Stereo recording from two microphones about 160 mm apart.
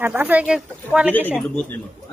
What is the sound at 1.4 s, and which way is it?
Speech, 5° left (ahead or behind).